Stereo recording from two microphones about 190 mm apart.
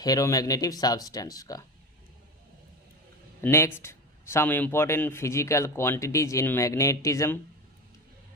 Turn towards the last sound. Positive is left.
turn(degrees=15)  # may be behind; listen again after turning